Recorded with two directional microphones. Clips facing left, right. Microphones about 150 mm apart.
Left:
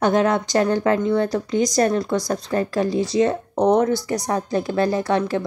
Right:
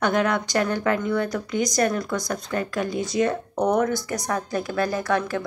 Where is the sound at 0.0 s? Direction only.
30° left (ahead or behind).